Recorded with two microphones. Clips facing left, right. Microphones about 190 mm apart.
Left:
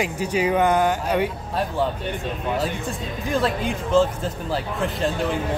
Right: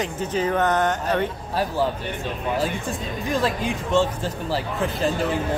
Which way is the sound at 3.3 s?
Centre (ahead or behind).